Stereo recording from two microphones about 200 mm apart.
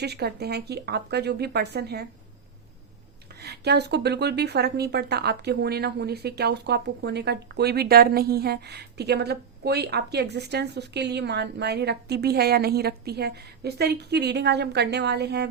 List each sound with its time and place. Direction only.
0.0 s a woman's voice: 55° right (ahead or behind)
3.4 s a woman's voice: 55° right (ahead or behind)